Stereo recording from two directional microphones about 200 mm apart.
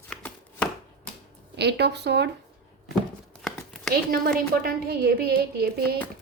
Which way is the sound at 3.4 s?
Centre (ahead or behind).